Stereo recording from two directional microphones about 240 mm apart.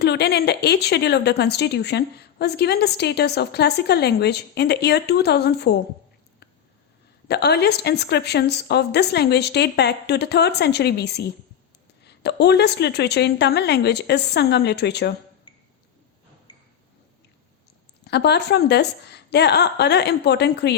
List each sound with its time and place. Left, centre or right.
0.0 s speech: left
7.3 s speech: left
18.0 s speech: left